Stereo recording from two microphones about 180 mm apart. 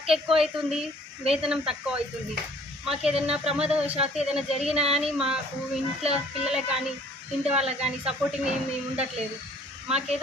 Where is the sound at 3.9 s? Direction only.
35° right (ahead or behind).